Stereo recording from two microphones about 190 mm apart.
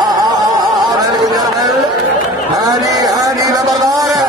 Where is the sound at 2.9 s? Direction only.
20° right (ahead or behind).